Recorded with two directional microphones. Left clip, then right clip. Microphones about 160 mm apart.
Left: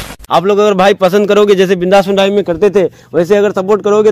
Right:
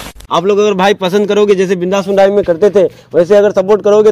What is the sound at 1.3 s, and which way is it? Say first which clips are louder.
Speech: left 2 dB; 45° left (ahead or behind).